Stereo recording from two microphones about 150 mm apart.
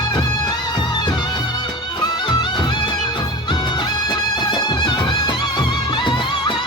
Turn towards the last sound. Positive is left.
turn(degrees=30)  # may be behind; listen again after turning